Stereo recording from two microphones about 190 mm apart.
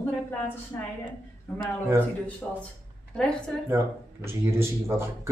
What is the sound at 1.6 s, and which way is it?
Speech, 15° right (ahead or behind).